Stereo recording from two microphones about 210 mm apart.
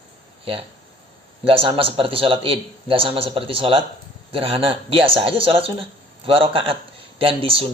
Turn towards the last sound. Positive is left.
turn(degrees=-25)  # may be behind; listen again after turning